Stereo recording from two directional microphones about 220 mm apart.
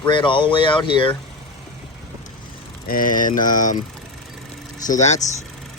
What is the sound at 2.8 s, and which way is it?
Speech, 40° left (ahead or behind).